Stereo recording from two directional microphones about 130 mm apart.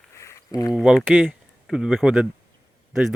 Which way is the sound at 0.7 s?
5° right (ahead or behind).